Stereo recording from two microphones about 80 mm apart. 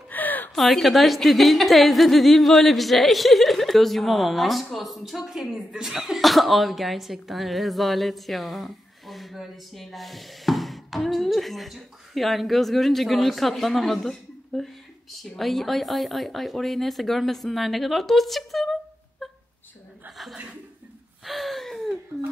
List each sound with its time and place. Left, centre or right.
0.1 s a sound: left
0.6 s speech: centre
21.3 s gasp: centre